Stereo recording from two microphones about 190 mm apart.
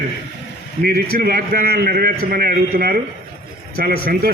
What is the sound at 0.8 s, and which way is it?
A man's voice, 55° right (ahead or behind).